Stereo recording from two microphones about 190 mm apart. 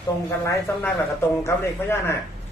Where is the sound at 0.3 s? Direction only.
10° left (ahead or behind).